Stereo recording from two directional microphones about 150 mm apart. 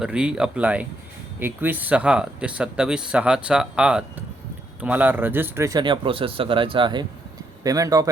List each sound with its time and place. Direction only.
0.0 s speech: 5° right (ahead or behind)
5.8 s speech: 35° right (ahead or behind)